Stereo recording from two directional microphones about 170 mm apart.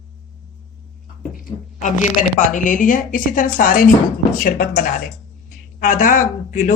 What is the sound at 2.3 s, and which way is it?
Speech, 50° left (ahead or behind).